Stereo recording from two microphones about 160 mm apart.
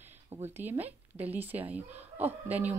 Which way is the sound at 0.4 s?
40° right (ahead or behind).